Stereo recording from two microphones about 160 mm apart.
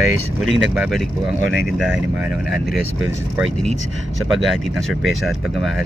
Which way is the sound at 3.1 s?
15° right (ahead or behind).